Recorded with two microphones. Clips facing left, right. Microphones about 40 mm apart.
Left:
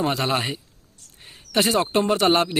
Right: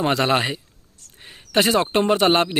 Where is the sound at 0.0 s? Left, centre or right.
Right.